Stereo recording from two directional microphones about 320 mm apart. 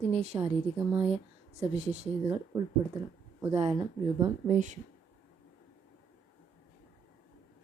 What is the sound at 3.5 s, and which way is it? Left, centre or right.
Speech, centre.